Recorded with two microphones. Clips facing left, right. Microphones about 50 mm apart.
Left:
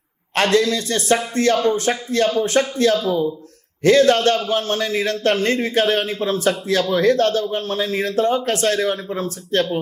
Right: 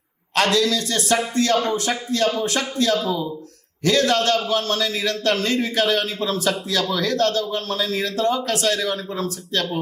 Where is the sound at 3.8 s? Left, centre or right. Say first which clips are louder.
Left 5 dB; left.